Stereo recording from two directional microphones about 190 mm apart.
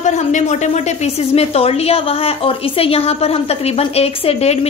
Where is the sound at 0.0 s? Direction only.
40° left (ahead or behind).